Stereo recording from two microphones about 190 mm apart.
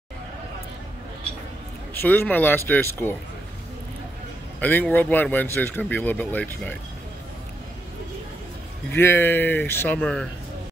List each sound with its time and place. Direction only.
2.0 s speech: 10° left (ahead or behind)
4.6 s speech: 10° left (ahead or behind)
8.9 s speech: 10° left (ahead or behind)